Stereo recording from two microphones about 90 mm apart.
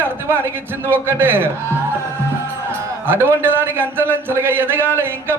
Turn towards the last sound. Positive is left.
turn(degrees=-25)  # may be behind; listen again after turning